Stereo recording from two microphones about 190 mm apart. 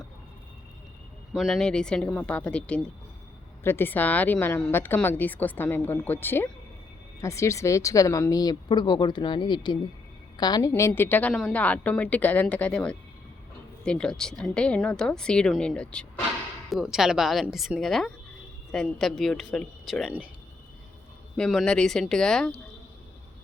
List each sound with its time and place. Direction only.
1.3 s a woman's voice: centre (ahead or behind)
21.3 s a woman's voice: centre (ahead or behind)